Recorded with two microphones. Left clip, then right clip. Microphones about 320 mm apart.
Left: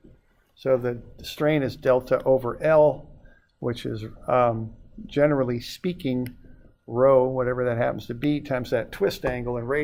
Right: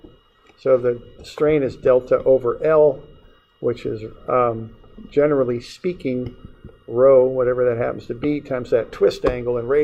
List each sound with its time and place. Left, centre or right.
0.6 s speech: left